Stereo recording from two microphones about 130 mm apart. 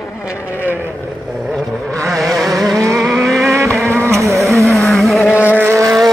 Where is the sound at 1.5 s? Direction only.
Centre (ahead or behind).